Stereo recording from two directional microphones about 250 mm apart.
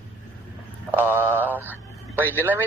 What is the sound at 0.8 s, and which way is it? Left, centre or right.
Speech, centre.